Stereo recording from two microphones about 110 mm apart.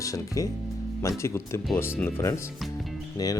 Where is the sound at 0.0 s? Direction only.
30° left (ahead or behind).